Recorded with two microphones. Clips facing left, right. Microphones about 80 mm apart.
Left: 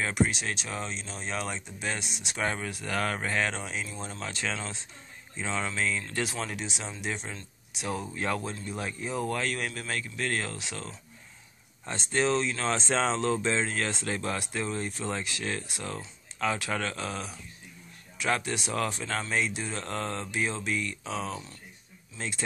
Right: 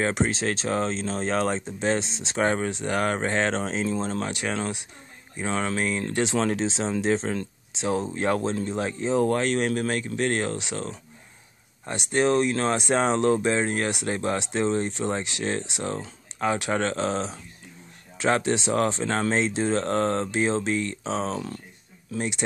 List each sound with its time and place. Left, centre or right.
0.1 s speech: right
2.7 s speech: right
4.3 s speech: centre
5.5 s speech: right
6.5 s speech: right